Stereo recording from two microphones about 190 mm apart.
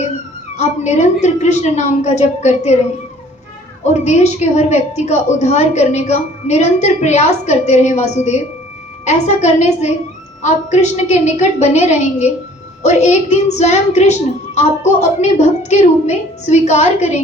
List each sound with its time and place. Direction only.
0.5 s a woman's voice: 35° left (ahead or behind)
3.8 s a woman's voice: 35° left (ahead or behind)